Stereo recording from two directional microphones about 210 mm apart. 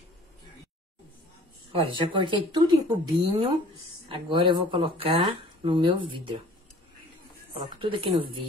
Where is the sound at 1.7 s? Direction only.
25° right (ahead or behind).